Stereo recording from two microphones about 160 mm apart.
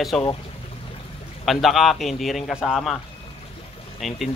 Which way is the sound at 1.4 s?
Centre (ahead or behind).